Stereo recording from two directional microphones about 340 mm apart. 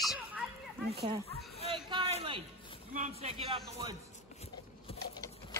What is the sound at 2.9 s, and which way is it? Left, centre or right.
A man's voice, centre.